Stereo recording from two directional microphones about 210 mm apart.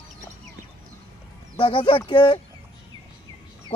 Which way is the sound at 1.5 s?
25° left (ahead or behind).